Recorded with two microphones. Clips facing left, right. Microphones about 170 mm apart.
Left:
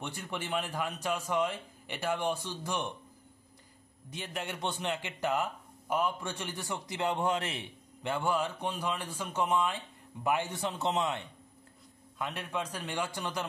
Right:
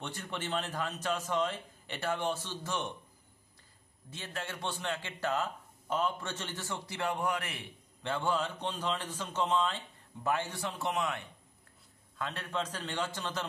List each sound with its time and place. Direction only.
0.0 s speech: 10° left (ahead or behind)
4.1 s speech: 15° left (ahead or behind)
8.0 s a man's voice: 15° left (ahead or behind)
12.2 s speech: 15° left (ahead or behind)